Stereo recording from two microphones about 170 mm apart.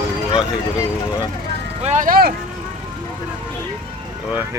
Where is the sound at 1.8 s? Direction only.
45° right (ahead or behind).